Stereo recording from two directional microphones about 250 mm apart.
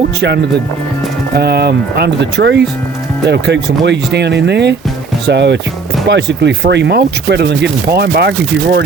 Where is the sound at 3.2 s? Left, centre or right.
Right.